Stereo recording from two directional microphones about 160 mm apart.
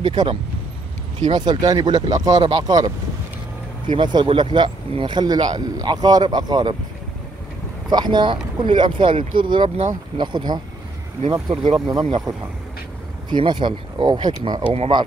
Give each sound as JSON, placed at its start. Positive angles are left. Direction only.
{"t": 0.0, "sound": "speech", "side_deg": -25}
{"t": 3.9, "sound": "speech", "side_deg": -30}
{"t": 7.9, "sound": "speech", "side_deg": -25}